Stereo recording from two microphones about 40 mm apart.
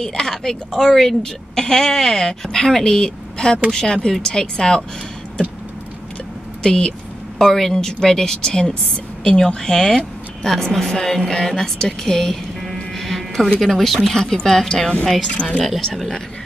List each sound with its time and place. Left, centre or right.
0.0 s a woman's voice: centre
6.6 s a woman's voice: centre
12.7 s music: centre
13.6 s a woman's voice: centre